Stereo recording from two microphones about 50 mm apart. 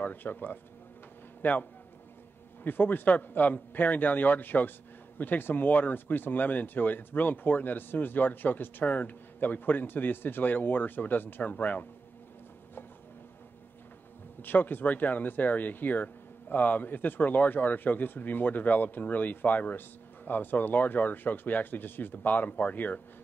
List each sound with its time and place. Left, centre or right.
0.0 s a man's voice: left
14.4 s speech: left